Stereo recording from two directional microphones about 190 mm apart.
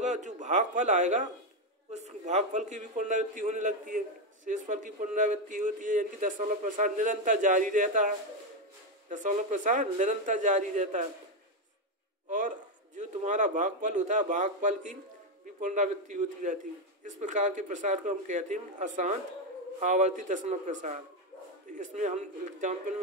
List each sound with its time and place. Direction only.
0.0 s a man's voice: 40° right (ahead or behind)
9.1 s a man's voice: 40° right (ahead or behind)
12.3 s a man's voice: 40° right (ahead or behind)